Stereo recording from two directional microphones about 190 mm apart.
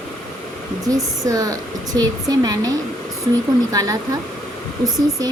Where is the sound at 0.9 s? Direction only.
20° right (ahead or behind).